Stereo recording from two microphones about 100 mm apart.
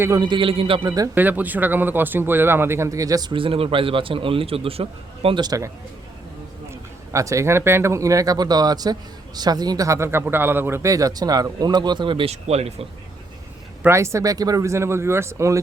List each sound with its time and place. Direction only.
0.1 s a man's voice: 50° right (ahead or behind); by 0.9 s 70° right (ahead or behind)
0.9 s speech: 35° right (ahead or behind)
1.1 s speech: 20° right (ahead or behind); by 3.3 s 40° right (ahead or behind)
3.3 s a man's voice: 65° right (ahead or behind)
5.4 s speech: 35° right (ahead or behind)
7.1 s speech: 30° right (ahead or behind)
10.9 s speech: 40° right (ahead or behind); by 12.9 s 90° right
13.8 s speech: 30° right (ahead or behind)